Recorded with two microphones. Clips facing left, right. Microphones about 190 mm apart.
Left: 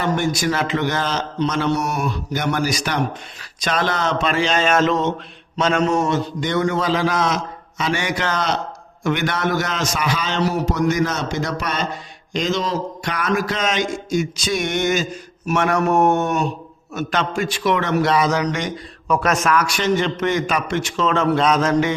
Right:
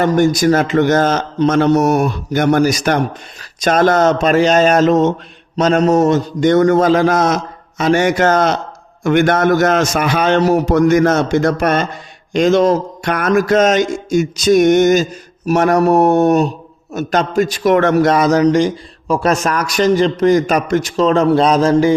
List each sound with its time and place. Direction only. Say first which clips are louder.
0.0 s a man's voice: right 8 dB; 45° right (ahead or behind)